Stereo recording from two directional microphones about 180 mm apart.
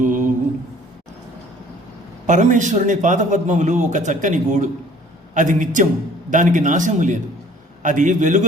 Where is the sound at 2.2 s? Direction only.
45° right (ahead or behind).